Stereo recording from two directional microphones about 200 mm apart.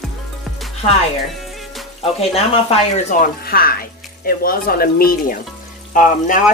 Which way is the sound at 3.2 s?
50° left (ahead or behind).